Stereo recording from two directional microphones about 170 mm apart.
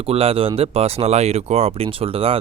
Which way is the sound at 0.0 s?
35° right (ahead or behind).